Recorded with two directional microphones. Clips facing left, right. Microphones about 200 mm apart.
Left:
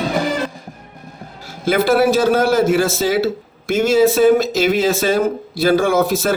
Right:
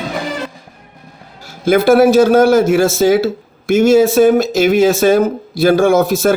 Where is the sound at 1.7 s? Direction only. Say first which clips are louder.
Right 5 dB; 45° right (ahead or behind).